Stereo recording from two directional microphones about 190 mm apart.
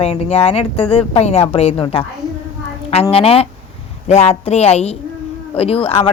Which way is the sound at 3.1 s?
30° left (ahead or behind).